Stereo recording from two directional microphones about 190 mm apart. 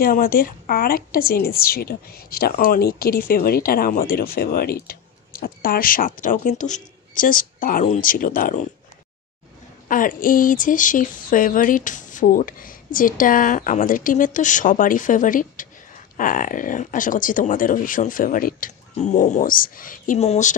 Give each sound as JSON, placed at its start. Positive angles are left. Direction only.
{"t": 0.0, "sound": "a woman's voice", "side_deg": 50}
{"t": 9.8, "sound": "a woman's voice", "side_deg": 45}